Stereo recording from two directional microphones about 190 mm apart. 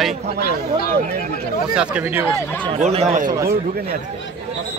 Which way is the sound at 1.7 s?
5° right (ahead or behind).